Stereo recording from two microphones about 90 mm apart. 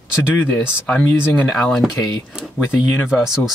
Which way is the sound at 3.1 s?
5° right (ahead or behind).